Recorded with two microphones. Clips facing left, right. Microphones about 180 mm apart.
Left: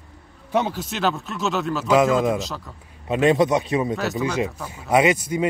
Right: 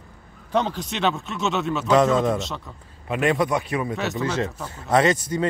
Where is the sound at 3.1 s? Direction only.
25° left (ahead or behind).